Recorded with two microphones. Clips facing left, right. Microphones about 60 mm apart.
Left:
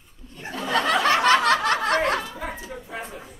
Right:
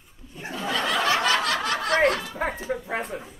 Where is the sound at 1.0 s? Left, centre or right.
Left.